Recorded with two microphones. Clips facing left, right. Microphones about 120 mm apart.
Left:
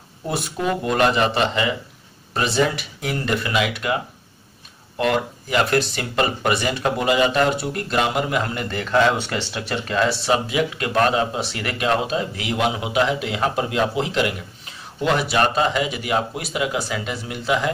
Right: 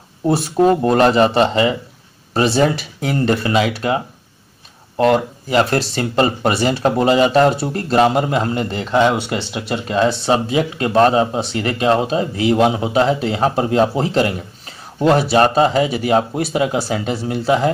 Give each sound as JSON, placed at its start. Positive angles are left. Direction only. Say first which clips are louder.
{"t": 0.3, "sound": "speech", "louder": "right 10 dB", "side_deg": -40}